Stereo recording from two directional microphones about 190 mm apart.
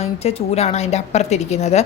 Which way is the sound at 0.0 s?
35° left (ahead or behind).